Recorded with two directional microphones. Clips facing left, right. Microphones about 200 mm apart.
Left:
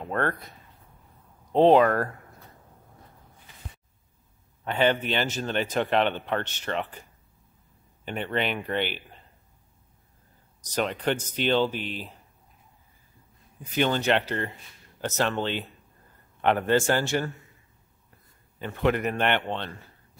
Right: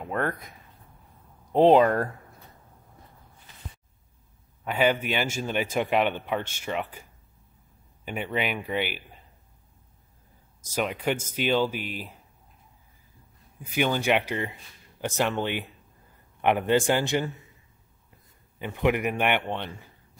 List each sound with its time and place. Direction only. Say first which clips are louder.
0.0 s speech: left 1 dB; 10° right (ahead or behind)
4.6 s speech: even; 10° right (ahead or behind)
10.6 s speech: left 1 dB; 5° right (ahead or behind)
13.6 s speech: left 1 dB; 10° right (ahead or behind)
18.6 s speech: even; 15° right (ahead or behind)